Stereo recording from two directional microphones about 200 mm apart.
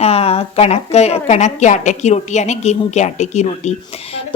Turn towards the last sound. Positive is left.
turn(degrees=35)  # may be behind; listen again after turning